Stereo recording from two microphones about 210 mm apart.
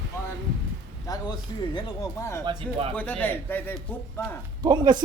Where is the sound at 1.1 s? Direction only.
15° left (ahead or behind).